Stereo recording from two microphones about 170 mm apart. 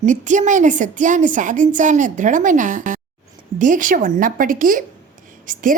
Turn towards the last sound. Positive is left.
turn(degrees=-50)  # may be behind; listen again after turning